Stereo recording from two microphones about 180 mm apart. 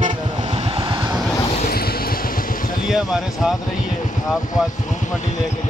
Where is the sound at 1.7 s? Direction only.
55° left (ahead or behind).